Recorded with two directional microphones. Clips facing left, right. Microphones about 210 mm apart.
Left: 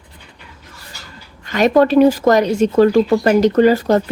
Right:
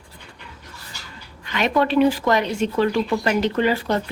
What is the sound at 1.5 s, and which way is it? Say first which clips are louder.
Speech: left 7 dB; 40° left (ahead or behind).